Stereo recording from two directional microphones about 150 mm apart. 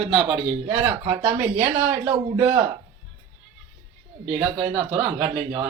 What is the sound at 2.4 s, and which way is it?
Speech, 30° right (ahead or behind).